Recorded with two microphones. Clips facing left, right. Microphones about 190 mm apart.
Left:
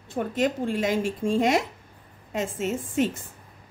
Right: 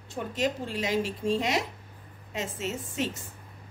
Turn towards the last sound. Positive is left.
turn(degrees=50)  # may be behind; listen again after turning